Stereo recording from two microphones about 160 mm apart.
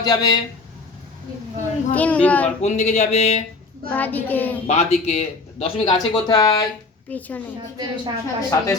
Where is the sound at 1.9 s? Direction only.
10° left (ahead or behind).